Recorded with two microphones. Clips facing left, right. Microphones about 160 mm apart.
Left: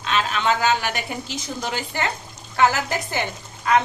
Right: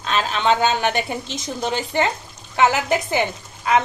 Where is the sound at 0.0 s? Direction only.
35° right (ahead or behind).